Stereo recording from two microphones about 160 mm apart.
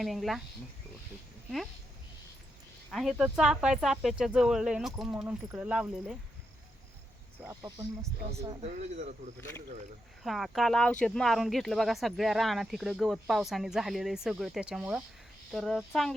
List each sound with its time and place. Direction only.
0.0 s speech: centre (ahead or behind)
2.9 s speech: centre (ahead or behind)
8.6 s speech: 45° right (ahead or behind)
10.2 s speech: centre (ahead or behind)